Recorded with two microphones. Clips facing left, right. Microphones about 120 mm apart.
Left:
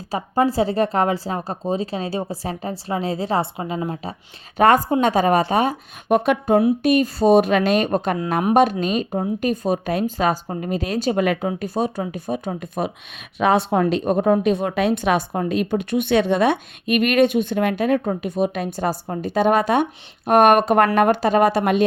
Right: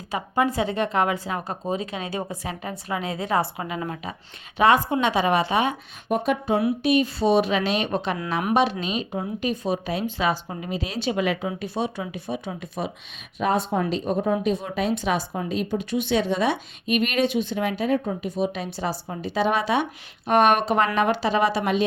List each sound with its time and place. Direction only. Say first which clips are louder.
0.1 s a woman's voice: left 4 dB; 35° left (ahead or behind)
4.5 s a woman's voice: left 4 dB; 45° left (ahead or behind)
6.1 s speech: left 5 dB; 70° left (ahead or behind)
6.8 s a woman's voice: left 4 dB; 45° left (ahead or behind)
13.4 s speech: left 5 dB; 80° left; by 21.8 s 55° left (ahead or behind)